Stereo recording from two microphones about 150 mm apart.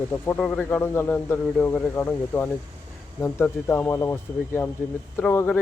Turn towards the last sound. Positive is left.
turn(degrees=10)  # may be behind; listen again after turning